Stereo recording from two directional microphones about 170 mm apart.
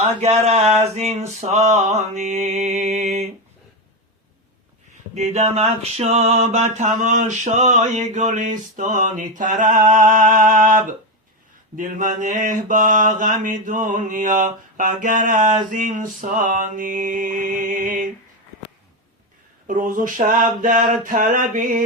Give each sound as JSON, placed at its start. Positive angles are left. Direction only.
{"t": 0.0, "sound": "male singing", "side_deg": -40}
{"t": 5.1, "sound": "mantra", "side_deg": -40}
{"t": 19.6, "sound": "mantra", "side_deg": -50}